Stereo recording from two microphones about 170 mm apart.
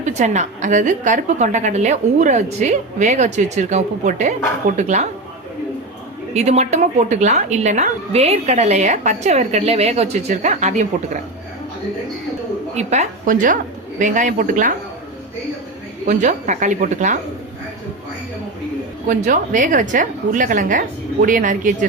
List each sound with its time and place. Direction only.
0.0 s a woman's voice: 45° right (ahead or behind)
6.3 s a woman's voice: 40° right (ahead or behind)
12.7 s a woman's voice: 40° right (ahead or behind)
16.0 s a woman's voice: 45° right (ahead or behind)
19.0 s a woman's voice: 50° right (ahead or behind)